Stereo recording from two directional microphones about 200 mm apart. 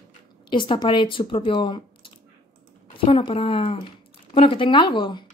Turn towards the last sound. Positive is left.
turn(degrees=25)  # may be behind; listen again after turning